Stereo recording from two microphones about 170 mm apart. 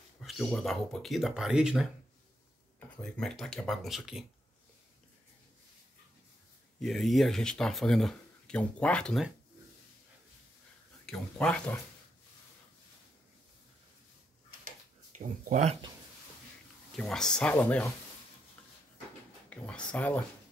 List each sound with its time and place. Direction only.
0.2 s speech: centre (ahead or behind)
3.0 s speech: 5° left (ahead or behind)
6.8 s speech: centre (ahead or behind)
11.1 s speech: 5° left (ahead or behind)
15.1 s speech: 50° right (ahead or behind)
16.9 s speech: 5° left (ahead or behind)
19.5 s speech: 5° left (ahead or behind)